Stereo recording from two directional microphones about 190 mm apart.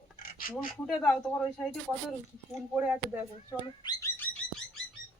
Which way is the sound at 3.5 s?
20° left (ahead or behind).